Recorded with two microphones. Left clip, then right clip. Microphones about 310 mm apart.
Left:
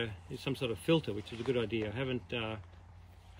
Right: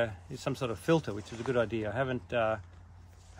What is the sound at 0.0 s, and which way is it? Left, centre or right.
Speech, centre.